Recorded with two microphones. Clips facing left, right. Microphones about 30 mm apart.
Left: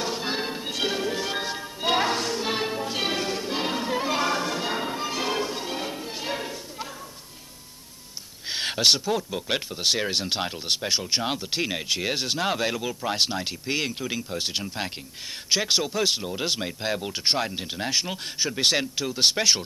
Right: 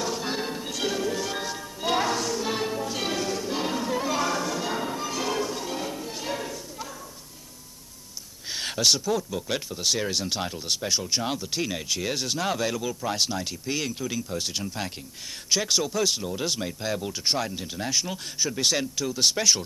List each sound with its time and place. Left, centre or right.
0.0 s music: left
8.4 s speech: left